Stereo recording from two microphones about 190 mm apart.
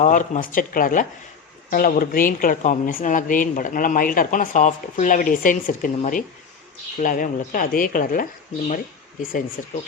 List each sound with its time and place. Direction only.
0.0 s a woman's voice: 40° left (ahead or behind)